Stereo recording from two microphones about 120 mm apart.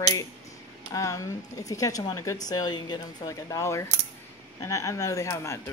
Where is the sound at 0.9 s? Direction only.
25° left (ahead or behind).